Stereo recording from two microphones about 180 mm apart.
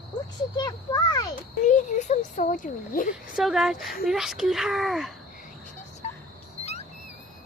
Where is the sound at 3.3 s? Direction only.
Centre (ahead or behind).